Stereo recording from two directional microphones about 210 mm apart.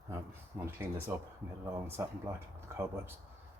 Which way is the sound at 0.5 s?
10° right (ahead or behind).